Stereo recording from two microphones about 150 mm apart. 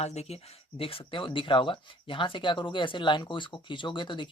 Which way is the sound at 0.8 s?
35° left (ahead or behind).